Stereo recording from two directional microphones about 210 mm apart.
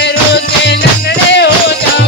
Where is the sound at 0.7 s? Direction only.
55° left (ahead or behind).